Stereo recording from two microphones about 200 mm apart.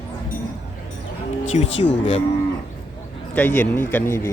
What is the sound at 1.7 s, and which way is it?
Speech, 65° left (ahead or behind).